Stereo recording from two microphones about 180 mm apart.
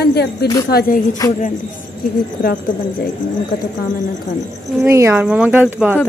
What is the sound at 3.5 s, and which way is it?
Speech, 65° left (ahead or behind).